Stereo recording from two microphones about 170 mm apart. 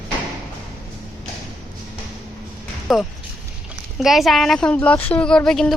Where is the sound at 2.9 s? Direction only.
Centre (ahead or behind).